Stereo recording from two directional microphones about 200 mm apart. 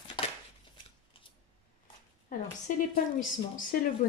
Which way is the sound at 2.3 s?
40° left (ahead or behind).